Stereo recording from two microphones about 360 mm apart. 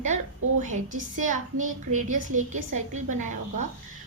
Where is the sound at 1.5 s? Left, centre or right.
Right.